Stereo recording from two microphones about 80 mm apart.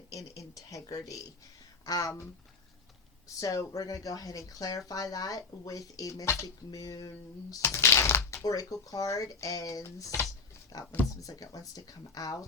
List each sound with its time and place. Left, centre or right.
0.1 s a sound: left
1.8 s speech: left
3.2 s speech: left
7.6 s speech: left
11.2 s speech: left